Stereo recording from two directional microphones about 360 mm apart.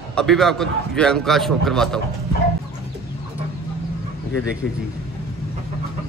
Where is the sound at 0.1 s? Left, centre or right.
Centre.